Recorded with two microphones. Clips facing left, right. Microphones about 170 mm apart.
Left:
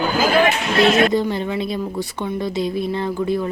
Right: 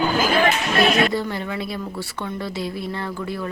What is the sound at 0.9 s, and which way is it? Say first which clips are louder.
A woman's voice: left 4 dB; 20° left (ahead or behind).